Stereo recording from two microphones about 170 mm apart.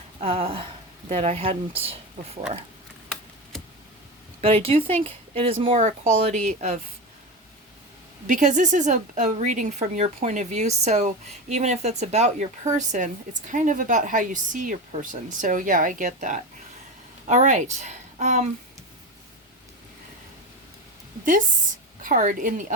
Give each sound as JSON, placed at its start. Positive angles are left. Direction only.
{"t": 0.2, "sound": "speech", "side_deg": -35}
{"t": 4.4, "sound": "speech", "side_deg": -35}
{"t": 4.9, "sound": "speech", "side_deg": 10}
{"t": 5.3, "sound": "speech", "side_deg": -35}
{"t": 8.3, "sound": "a woman's voice", "side_deg": -45}
{"t": 22.0, "sound": "speech", "side_deg": -55}